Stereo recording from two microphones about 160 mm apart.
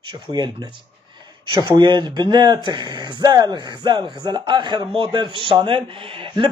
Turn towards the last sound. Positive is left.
turn(degrees=-30)  # may be behind; listen again after turning